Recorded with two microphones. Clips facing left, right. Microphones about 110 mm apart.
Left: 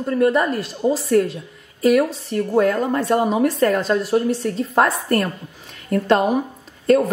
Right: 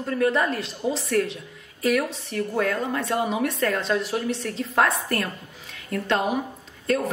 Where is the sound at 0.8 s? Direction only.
45° left (ahead or behind).